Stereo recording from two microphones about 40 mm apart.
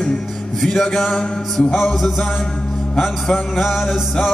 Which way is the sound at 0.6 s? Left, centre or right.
Centre.